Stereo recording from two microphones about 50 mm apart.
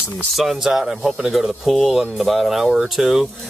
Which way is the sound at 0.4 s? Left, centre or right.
Centre.